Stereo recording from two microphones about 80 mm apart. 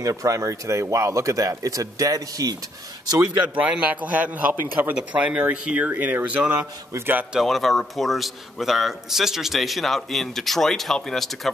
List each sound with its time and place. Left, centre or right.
0.0 s speech: right
3.5 s speech: centre
7.3 s a man's voice: centre